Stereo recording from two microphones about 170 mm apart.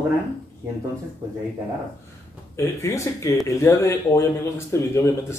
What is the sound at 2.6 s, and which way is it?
A man's voice, 15° left (ahead or behind).